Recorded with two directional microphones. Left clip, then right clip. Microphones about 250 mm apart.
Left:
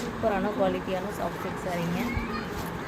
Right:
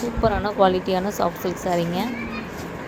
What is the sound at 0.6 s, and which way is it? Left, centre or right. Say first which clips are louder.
Speech: right 10 dB; centre.